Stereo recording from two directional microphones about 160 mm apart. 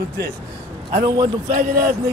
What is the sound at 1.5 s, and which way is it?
Speech, 60° right (ahead or behind).